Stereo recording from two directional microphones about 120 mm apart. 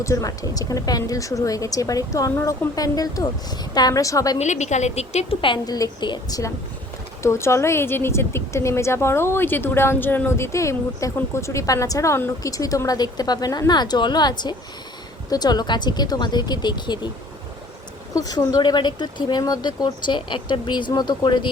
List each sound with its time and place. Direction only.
0.0 s a woman's voice: 25° left (ahead or behind)
4.4 s a woman's voice: 75° left (ahead or behind)
5.4 s speech: 40° left (ahead or behind)
7.2 s a woman's voice: 20° left (ahead or behind); by 17.1 s 40° left (ahead or behind)
18.1 s speech: 30° left (ahead or behind)